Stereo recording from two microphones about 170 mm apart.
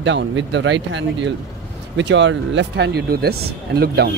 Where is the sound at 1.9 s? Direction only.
90° right.